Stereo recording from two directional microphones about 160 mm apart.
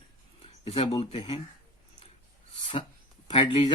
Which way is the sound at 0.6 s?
35° left (ahead or behind).